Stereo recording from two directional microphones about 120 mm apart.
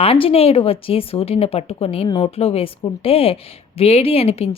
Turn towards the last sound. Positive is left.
turn(degrees=55)  # may be behind; listen again after turning